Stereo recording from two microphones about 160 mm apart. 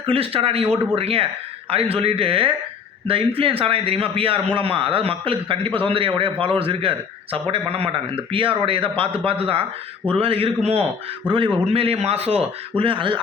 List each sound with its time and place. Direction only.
0.0 s a man's voice: 35° right (ahead or behind)